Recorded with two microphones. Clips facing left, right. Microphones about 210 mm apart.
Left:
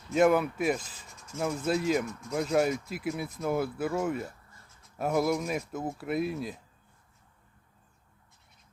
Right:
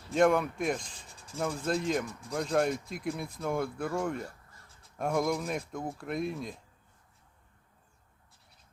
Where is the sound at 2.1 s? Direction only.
30° right (ahead or behind).